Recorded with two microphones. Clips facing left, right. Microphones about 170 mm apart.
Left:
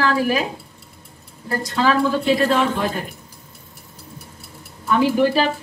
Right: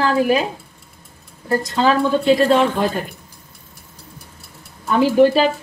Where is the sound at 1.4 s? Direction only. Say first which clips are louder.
Right 3 dB; 25° right (ahead or behind).